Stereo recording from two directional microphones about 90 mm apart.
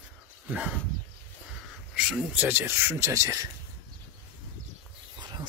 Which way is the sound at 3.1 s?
40° right (ahead or behind).